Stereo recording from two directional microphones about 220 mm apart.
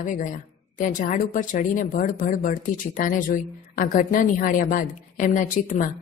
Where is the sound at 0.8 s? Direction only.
35° left (ahead or behind).